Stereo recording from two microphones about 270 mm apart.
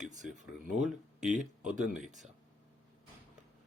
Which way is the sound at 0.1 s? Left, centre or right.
Right.